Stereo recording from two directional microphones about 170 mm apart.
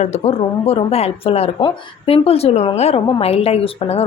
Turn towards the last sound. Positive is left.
turn(degrees=35)  # may be behind; listen again after turning